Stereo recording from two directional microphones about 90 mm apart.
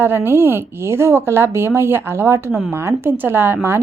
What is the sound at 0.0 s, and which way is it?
Speech, 25° right (ahead or behind).